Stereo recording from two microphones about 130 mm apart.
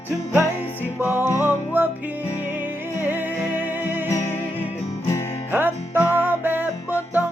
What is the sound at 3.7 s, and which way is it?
Music, 15° right (ahead or behind).